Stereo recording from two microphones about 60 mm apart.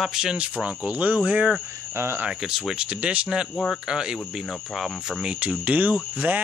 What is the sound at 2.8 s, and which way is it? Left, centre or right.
Speech, centre.